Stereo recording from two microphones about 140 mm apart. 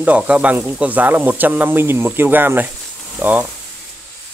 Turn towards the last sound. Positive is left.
turn(degrees=-10)  # may be behind; listen again after turning